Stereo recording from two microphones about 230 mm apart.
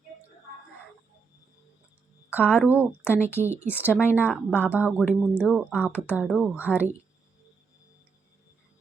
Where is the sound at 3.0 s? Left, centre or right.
Centre.